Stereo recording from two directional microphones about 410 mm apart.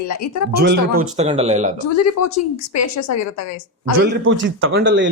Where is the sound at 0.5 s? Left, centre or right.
Right.